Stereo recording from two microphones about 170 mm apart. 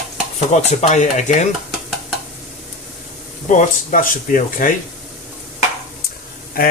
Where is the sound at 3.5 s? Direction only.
50° left (ahead or behind).